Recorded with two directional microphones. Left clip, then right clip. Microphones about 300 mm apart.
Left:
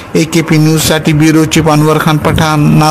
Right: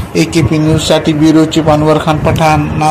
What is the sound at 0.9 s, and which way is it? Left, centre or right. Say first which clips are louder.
A man's voice: right 3 dB; left.